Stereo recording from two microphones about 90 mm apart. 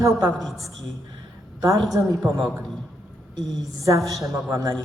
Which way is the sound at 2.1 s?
40° right (ahead or behind).